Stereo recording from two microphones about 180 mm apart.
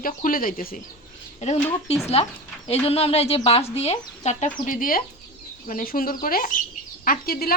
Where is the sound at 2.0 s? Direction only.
35° left (ahead or behind).